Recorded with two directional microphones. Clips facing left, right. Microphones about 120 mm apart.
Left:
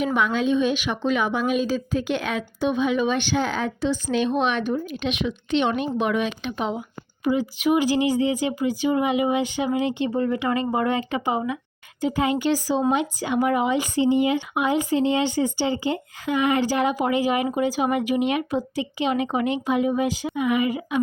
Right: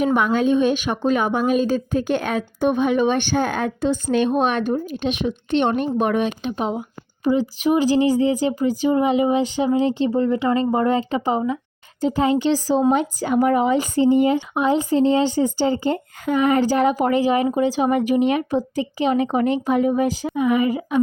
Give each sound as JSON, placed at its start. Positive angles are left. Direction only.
{"t": 0.0, "sound": "a woman's voice", "side_deg": -45}